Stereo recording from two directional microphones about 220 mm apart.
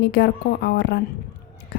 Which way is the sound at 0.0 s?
50° left (ahead or behind).